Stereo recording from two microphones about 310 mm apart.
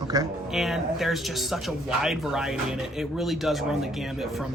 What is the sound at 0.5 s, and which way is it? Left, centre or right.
Speech, centre.